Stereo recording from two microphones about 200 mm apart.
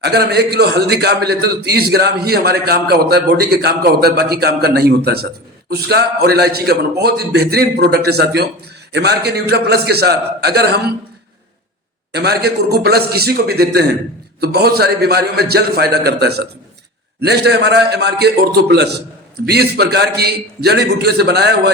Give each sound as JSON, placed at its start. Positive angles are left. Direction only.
{"t": 0.0, "sound": "a man's voice", "side_deg": -55}
{"t": 12.1, "sound": "a man's voice", "side_deg": -55}